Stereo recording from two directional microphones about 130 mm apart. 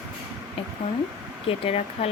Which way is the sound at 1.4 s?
50° left (ahead or behind).